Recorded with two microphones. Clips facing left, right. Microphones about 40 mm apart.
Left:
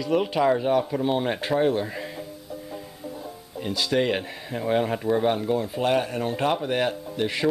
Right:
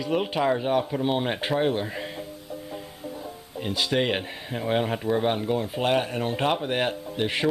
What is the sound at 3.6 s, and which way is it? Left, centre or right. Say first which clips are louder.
Speech: left 1 dB; right.